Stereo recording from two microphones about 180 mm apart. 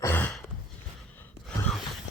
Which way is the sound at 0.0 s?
10° left (ahead or behind).